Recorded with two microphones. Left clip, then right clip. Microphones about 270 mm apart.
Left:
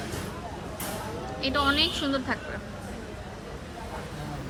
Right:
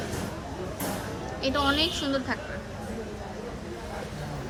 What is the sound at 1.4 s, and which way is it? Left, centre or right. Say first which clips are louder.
Speech: left 1 dB; centre.